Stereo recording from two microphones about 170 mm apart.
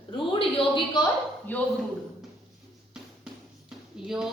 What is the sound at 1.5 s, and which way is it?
Speech, 10° left (ahead or behind).